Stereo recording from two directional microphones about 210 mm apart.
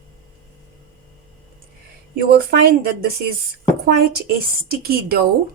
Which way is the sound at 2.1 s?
45° right (ahead or behind).